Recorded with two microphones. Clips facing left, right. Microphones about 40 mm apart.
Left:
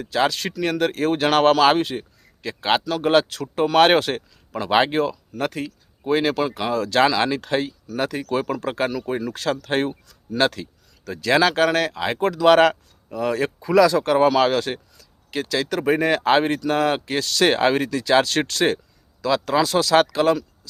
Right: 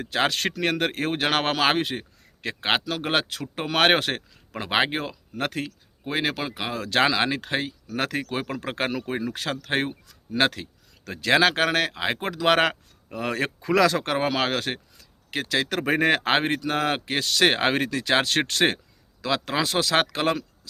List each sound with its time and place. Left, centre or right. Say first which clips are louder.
0.0 s speech: left 3 dB; right
2.0 s a man's voice: left 3 dB; right
6.1 s speech: left 7 dB; centre; by 20.4 s right